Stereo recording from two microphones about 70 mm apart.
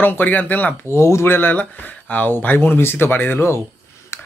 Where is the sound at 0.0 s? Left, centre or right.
Left.